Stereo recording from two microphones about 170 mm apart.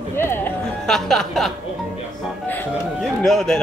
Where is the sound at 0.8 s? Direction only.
5° left (ahead or behind).